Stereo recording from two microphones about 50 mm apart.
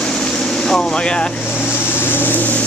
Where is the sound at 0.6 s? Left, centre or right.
Centre.